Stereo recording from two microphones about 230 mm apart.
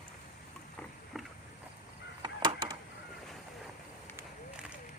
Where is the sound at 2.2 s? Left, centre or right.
Centre.